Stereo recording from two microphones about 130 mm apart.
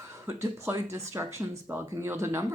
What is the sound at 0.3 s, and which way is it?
Speech, 20° right (ahead or behind).